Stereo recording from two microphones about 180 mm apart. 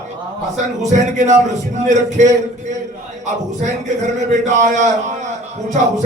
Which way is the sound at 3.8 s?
40° right (ahead or behind).